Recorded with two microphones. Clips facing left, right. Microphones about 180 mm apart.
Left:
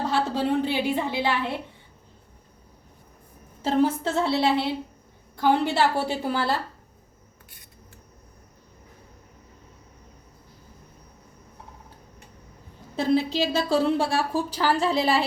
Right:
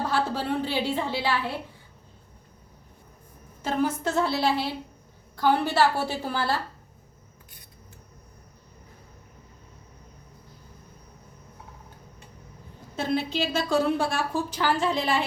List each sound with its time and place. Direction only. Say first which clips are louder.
0.6 s a woman's voice: left 2 dB; 15° left (ahead or behind)
3.6 s a woman's voice: left 4 dB; 30° left (ahead or behind)
13.0 s a woman's voice: left 4 dB; 35° left (ahead or behind)